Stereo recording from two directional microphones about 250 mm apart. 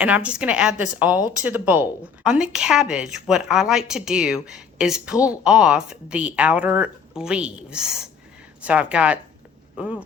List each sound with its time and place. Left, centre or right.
0.0 s a woman's voice: centre